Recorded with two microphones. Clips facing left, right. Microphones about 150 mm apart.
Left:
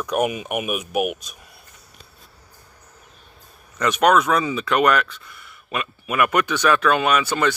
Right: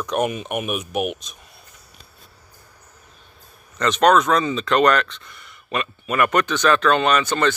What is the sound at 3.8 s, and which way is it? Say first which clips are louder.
Speech: right 1 dB; 10° left (ahead or behind).